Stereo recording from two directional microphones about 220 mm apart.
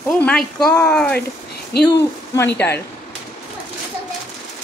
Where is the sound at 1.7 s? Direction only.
45° left (ahead or behind).